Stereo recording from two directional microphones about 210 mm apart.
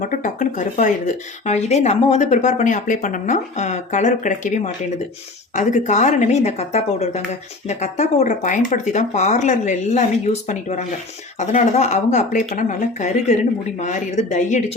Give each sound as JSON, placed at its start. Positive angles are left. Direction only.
{"t": 0.0, "sound": "speech", "side_deg": 40}